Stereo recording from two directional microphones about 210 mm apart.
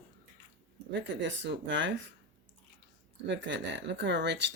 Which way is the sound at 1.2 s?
55° right (ahead or behind).